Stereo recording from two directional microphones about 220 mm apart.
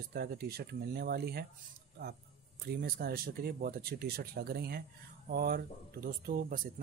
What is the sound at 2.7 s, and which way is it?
Speech, 40° right (ahead or behind).